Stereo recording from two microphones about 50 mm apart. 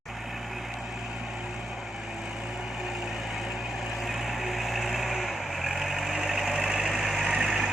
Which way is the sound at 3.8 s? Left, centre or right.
Centre.